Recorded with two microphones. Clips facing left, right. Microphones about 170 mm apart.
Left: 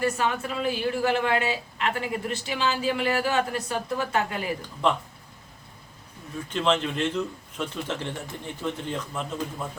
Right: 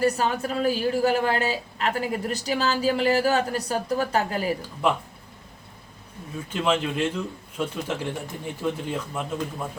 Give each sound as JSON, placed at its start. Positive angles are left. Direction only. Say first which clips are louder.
{"t": 0.0, "sound": "a woman's voice", "louder": "right 3 dB", "side_deg": -40}
{"t": 4.8, "sound": "a man's voice", "louder": "right 1 dB", "side_deg": -5}
{"t": 6.5, "sound": "a man's voice", "louder": "even", "side_deg": -10}